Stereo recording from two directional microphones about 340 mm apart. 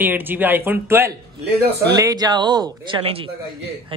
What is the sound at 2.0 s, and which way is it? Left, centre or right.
Speech, centre.